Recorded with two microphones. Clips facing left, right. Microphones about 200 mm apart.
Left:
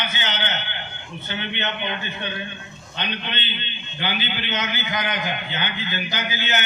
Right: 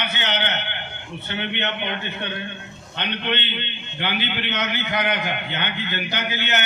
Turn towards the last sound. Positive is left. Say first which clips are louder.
# right 1 dB
turn(degrees=-65)  # may be behind; listen again after turning